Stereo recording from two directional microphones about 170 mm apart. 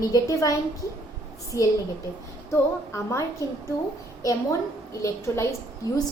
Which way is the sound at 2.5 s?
15° left (ahead or behind).